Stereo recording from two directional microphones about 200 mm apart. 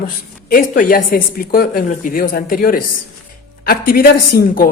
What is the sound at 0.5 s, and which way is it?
A woman's voice, 45° left (ahead or behind).